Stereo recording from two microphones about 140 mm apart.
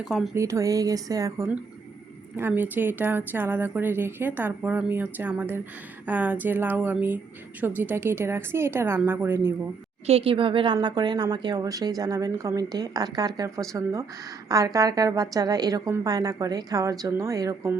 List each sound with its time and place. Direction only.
0.0 s speech: 5° right (ahead or behind)
0.3 s a woman's voice: 20° right (ahead or behind)
10.1 s a woman's voice: 40° right (ahead or behind); by 17.7 s 20° right (ahead or behind)